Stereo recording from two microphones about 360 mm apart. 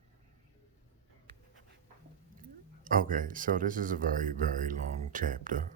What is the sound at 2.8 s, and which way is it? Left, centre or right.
Speech, right.